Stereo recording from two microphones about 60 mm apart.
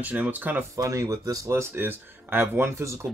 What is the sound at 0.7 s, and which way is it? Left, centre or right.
Speech, right.